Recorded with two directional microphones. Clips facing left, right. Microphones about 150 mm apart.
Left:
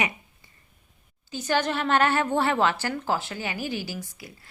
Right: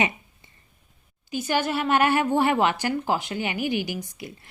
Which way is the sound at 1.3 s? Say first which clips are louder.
Right 1 dB; 10° right (ahead or behind).